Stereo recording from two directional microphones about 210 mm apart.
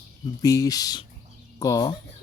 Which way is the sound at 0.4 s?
15° left (ahead or behind).